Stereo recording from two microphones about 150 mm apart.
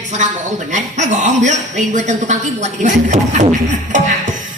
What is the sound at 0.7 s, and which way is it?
A woman's voice, 55° right (ahead or behind).